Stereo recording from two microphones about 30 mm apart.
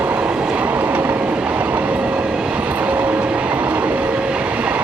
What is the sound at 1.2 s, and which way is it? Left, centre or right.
Train, right.